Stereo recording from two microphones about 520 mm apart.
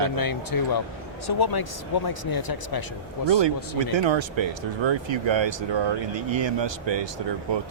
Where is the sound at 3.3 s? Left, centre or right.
Right.